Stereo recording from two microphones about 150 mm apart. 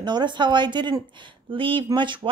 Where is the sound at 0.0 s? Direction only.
30° right (ahead or behind).